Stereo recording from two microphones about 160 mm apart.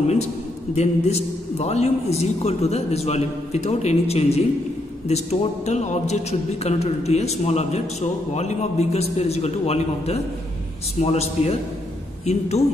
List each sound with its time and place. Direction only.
0.7 s a man's voice: 40° left (ahead or behind)